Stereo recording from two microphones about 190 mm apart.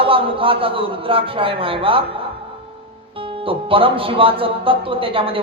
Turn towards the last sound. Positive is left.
turn(degrees=-30)  # may be behind; listen again after turning